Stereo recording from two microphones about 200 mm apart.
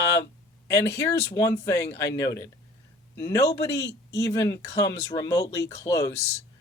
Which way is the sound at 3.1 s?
10° left (ahead or behind).